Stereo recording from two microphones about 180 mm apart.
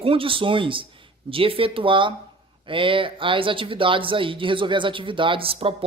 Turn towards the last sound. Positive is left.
turn(degrees=-30)  # may be behind; listen again after turning